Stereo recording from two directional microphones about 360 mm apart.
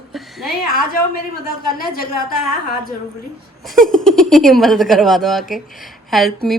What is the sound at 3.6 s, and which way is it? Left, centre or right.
Speech, centre.